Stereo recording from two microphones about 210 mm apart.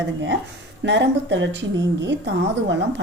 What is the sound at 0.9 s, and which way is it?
A woman's voice, 60° right (ahead or behind).